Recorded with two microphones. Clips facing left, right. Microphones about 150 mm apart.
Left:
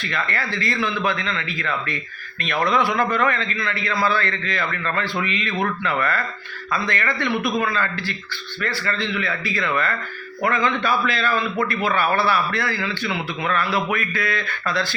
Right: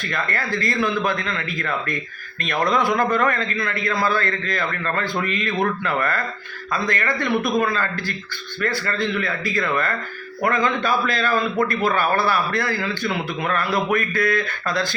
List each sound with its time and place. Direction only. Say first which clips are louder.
0.1 s a man's voice: right 2 dB; 45° right (ahead or behind)